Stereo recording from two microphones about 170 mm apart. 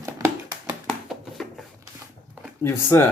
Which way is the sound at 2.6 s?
15° left (ahead or behind).